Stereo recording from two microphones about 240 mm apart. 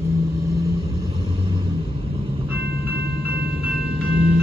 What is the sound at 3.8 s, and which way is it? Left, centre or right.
Music, right.